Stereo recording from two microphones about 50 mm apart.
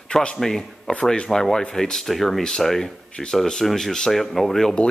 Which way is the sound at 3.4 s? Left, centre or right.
Centre.